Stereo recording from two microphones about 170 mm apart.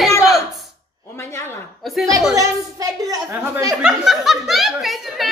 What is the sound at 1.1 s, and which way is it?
Speech, 15° left (ahead or behind).